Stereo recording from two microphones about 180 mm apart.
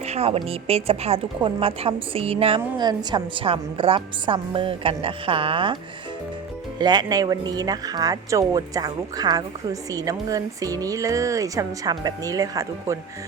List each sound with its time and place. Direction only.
0.0 s speech: 35° right (ahead or behind)
6.7 s speech: 25° right (ahead or behind)